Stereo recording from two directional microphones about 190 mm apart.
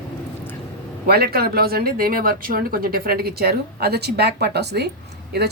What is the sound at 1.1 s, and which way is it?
Speech, 55° right (ahead or behind).